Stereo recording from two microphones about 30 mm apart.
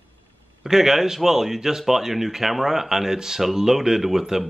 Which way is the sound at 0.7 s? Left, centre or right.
Centre.